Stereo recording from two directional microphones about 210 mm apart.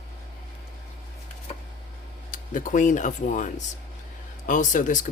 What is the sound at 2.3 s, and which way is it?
Speech, 40° left (ahead or behind).